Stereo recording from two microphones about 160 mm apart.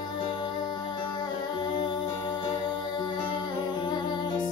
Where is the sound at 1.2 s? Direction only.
25° left (ahead or behind).